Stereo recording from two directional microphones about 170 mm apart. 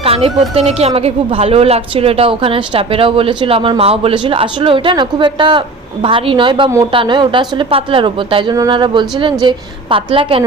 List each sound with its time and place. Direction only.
0.0 s a woman's voice: 35° right (ahead or behind)